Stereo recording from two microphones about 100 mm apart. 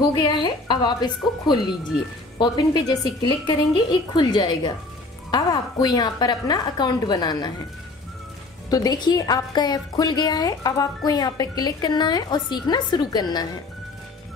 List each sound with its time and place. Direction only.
0.0 s a woman's voice: 45° left (ahead or behind)
8.6 s a woman's voice: 40° left (ahead or behind)